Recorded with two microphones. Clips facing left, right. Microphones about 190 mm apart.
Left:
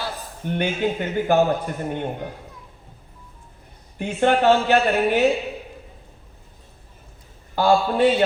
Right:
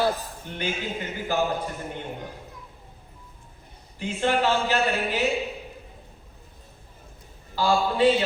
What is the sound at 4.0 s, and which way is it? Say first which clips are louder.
A man's voice: left 5 dB; 60° left (ahead or behind).